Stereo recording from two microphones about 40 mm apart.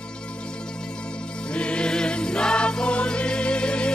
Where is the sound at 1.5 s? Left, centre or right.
Left.